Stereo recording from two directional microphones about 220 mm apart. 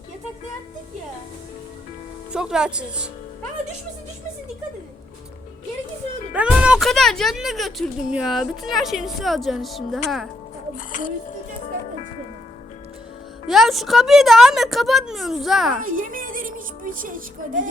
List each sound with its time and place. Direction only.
2.3 s speech: 5° right (ahead or behind)
6.3 s speech: 5° right (ahead or behind)
10.8 s speech: 35° left (ahead or behind)
13.5 s speech: centre (ahead or behind)
15.8 s speech: 40° right (ahead or behind)